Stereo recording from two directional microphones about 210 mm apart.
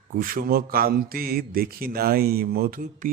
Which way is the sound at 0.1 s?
45° right (ahead or behind).